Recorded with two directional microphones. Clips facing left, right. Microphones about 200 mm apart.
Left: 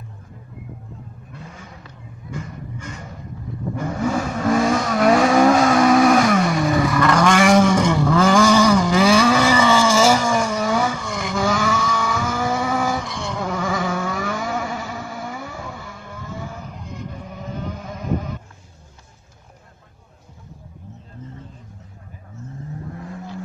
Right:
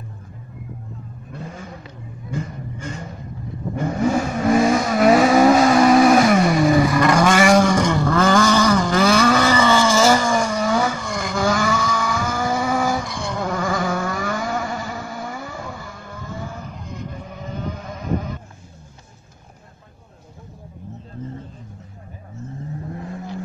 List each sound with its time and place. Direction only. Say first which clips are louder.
3.7 s vehicle: right 3 dB; 25° right (ahead or behind)
4.4 s vehicle: right 2 dB; 10° right (ahead or behind)
6.9 s roar: right 1 dB; 15° right (ahead or behind)